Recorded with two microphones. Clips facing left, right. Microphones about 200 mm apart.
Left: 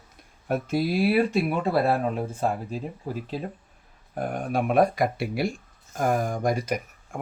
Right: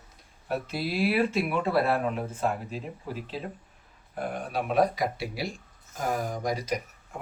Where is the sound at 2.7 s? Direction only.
45° left (ahead or behind).